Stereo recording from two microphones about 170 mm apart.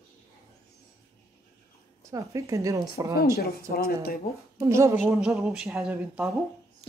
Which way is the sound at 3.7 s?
65° left (ahead or behind).